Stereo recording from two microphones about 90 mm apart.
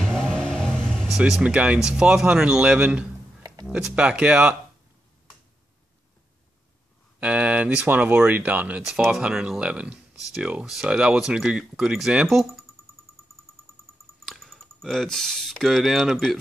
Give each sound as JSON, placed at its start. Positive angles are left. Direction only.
{"t": 0.0, "sound": "vehicle", "side_deg": 5}
{"t": 1.4, "sound": "speech", "side_deg": -15}
{"t": 7.2, "sound": "speech", "side_deg": -15}
{"t": 14.2, "sound": "speech", "side_deg": 0}